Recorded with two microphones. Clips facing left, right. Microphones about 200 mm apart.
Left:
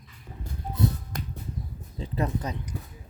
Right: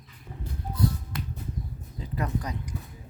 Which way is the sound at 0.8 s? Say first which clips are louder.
Left 1 dB; 25° left (ahead or behind).